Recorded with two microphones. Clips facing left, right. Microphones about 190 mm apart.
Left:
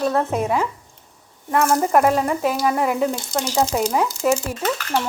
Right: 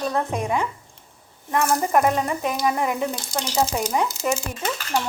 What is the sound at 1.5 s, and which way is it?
Speech, 55° left (ahead or behind).